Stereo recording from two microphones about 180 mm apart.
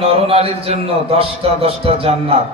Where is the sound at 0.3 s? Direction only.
35° right (ahead or behind).